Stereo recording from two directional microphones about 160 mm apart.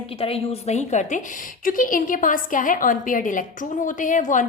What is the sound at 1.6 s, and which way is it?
A woman's voice, 60° left (ahead or behind).